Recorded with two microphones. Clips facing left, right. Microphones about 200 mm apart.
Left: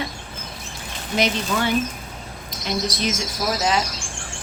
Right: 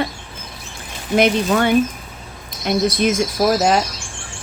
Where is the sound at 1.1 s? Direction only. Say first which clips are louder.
Right 7 dB; 55° right (ahead or behind).